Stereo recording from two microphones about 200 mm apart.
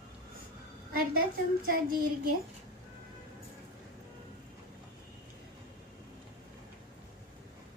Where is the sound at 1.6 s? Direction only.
45° right (ahead or behind).